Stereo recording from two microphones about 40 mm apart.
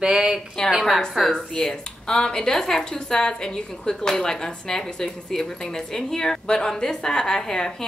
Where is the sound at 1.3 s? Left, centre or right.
Centre.